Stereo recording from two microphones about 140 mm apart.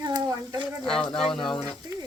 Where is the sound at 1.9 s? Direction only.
25° right (ahead or behind).